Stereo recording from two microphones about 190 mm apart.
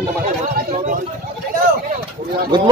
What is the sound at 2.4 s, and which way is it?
Speech, 25° right (ahead or behind).